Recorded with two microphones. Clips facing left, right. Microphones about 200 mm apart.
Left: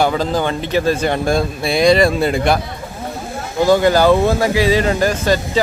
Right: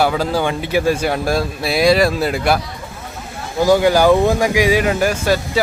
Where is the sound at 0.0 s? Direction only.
5° right (ahead or behind).